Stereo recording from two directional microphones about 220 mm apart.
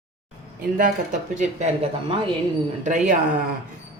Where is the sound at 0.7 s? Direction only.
35° right (ahead or behind).